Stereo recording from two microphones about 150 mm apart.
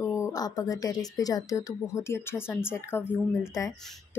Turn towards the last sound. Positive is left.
turn(degrees=20)  # may be behind; listen again after turning